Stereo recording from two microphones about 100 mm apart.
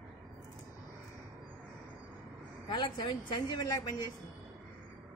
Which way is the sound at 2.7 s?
50° left (ahead or behind).